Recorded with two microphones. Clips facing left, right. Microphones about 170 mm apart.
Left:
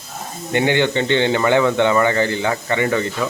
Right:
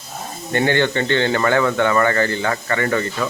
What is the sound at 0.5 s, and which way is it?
Speech, 15° left (ahead or behind).